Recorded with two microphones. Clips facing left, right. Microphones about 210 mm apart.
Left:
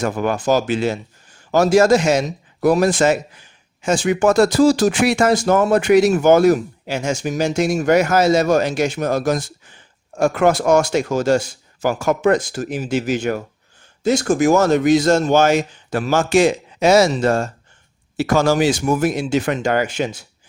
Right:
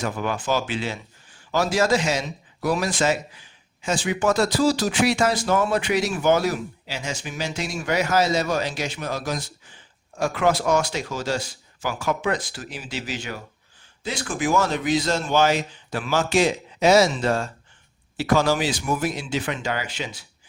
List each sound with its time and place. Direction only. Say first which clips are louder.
0.0 s a man's voice: left 7 dB; 45° left (ahead or behind)